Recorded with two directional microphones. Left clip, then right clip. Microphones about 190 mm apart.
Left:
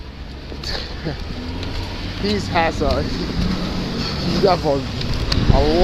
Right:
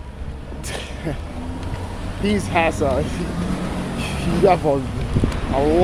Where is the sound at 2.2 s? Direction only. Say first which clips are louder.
Even; 15° right (ahead or behind).